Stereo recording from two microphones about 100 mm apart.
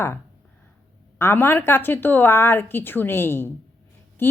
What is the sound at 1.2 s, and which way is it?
A woman's voice, 20° left (ahead or behind).